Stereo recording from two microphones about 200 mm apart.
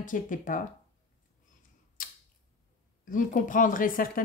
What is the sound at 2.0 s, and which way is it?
Camera, 45° left (ahead or behind).